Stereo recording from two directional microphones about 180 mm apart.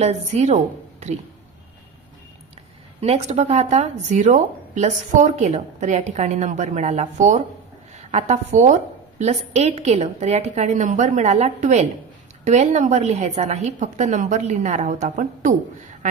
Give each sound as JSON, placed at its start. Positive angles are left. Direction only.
{"t": 0.0, "sound": "a woman's voice", "side_deg": -35}
{"t": 3.0, "sound": "a woman's voice", "side_deg": -35}